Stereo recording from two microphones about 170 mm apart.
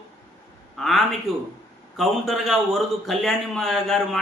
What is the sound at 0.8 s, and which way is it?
A man's voice, centre (ahead or behind).